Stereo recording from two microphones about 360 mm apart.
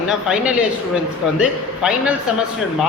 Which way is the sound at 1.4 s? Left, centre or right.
Centre.